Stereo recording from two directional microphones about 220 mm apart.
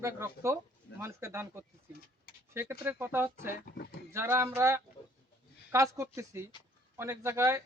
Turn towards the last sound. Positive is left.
turn(degrees=-10)  # may be behind; listen again after turning